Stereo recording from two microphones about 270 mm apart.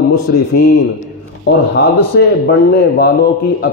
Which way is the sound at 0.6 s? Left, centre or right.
Left.